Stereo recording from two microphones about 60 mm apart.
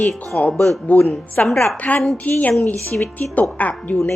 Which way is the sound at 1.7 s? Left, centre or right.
Left.